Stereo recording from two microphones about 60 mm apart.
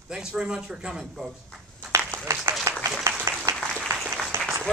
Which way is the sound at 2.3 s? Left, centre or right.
Right.